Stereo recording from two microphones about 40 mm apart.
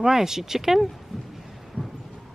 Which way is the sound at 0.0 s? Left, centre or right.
Centre.